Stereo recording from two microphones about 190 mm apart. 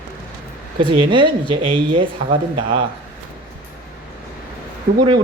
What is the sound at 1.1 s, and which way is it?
Speech, 25° right (ahead or behind).